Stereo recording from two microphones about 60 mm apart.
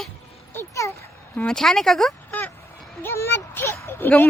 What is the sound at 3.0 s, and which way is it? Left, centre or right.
Speech, left.